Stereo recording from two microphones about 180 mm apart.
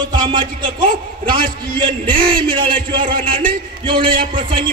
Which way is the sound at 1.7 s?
25° right (ahead or behind).